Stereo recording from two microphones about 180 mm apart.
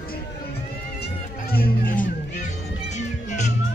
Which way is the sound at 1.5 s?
50° left (ahead or behind).